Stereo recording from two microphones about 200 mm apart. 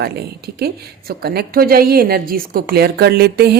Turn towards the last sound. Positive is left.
turn(degrees=-50)  # may be behind; listen again after turning